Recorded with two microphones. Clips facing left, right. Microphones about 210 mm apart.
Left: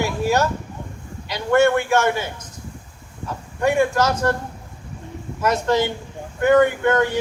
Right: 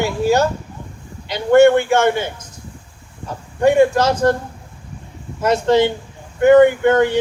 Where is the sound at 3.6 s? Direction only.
30° right (ahead or behind).